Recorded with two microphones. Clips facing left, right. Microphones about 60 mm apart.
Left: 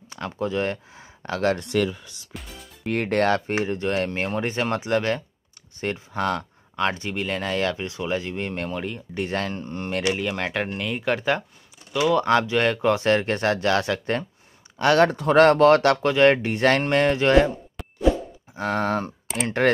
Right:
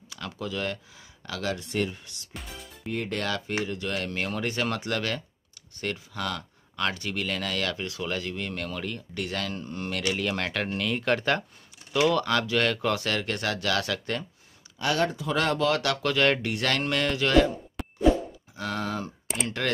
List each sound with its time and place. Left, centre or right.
0.1 s speech: left
2.8 s speech: left
3.1 s speech: left
10.1 s speech: centre
12.3 s speech: left
14.8 s speech: left
16.0 s speech: left
17.8 s plop: centre
18.5 s speech: left